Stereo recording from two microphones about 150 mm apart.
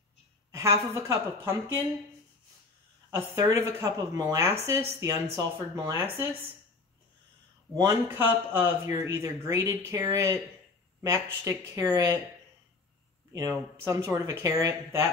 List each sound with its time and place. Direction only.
0.5 s speech: 20° right (ahead or behind)
3.3 s speech: 20° right (ahead or behind)
7.7 s a man's voice: 20° right (ahead or behind)
11.4 s speech: 20° right (ahead or behind)
13.3 s speech: 20° right (ahead or behind)